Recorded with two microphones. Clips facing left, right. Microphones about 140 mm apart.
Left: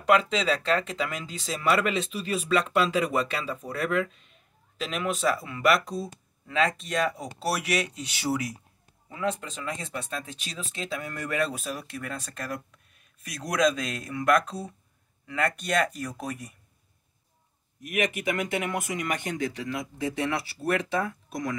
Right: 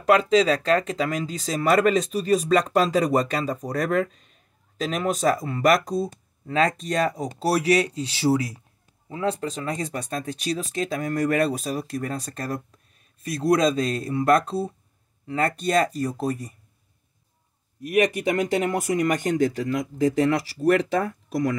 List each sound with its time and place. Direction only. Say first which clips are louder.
0.0 s speech: right 5 dB; 40° right (ahead or behind)
17.8 s speech: right 7 dB; 35° right (ahead or behind)